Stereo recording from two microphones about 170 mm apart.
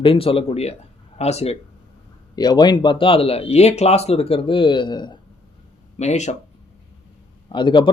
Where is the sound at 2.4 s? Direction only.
25° left (ahead or behind).